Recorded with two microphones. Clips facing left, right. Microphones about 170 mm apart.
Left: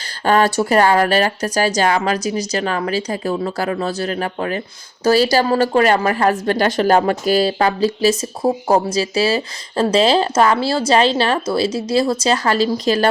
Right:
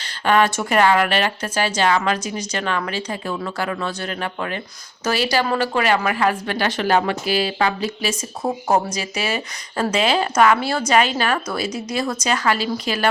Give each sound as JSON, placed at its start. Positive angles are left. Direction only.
{"t": 0.3, "sound": "a woman's voice", "side_deg": 35}